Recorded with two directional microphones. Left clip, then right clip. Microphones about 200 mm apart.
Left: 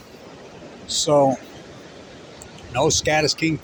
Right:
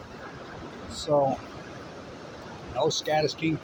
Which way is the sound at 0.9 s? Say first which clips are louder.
Left 7 dB; 60° left (ahead or behind).